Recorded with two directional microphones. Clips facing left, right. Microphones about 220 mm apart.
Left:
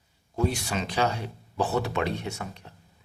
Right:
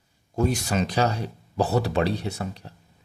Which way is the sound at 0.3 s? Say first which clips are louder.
Right 4 dB; 45° right (ahead or behind).